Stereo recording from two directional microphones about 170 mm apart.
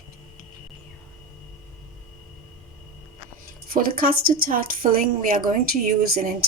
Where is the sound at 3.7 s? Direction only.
60° right (ahead or behind).